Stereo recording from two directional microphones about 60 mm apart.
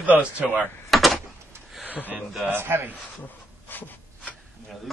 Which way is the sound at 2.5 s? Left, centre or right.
Right.